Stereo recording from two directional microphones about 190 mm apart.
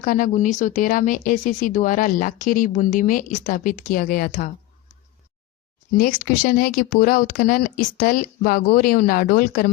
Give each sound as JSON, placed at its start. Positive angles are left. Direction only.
{"t": 0.0, "sound": "speech", "side_deg": 45}
{"t": 6.0, "sound": "speech", "side_deg": 50}